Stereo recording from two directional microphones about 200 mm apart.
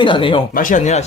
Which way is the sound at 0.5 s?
40° left (ahead or behind).